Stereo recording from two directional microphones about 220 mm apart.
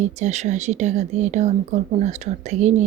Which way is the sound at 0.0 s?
30° right (ahead or behind).